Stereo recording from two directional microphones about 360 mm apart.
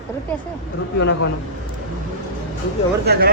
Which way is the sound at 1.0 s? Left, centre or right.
Left.